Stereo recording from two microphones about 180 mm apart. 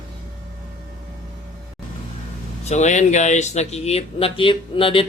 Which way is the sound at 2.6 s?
40° left (ahead or behind).